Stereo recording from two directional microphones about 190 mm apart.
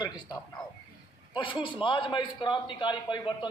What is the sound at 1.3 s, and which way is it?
A man's voice, 25° left (ahead or behind).